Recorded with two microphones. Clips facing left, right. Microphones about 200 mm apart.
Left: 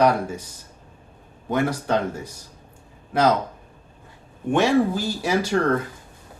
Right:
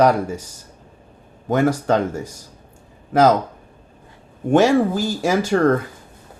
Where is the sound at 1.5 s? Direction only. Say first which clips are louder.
Right 5 dB; 45° right (ahead or behind).